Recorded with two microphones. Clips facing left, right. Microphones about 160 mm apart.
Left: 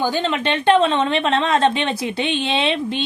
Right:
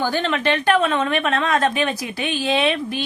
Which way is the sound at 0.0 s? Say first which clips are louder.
Even; 20° left (ahead or behind).